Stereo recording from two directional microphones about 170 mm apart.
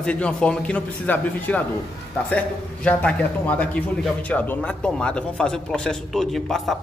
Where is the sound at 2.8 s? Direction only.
10° left (ahead or behind).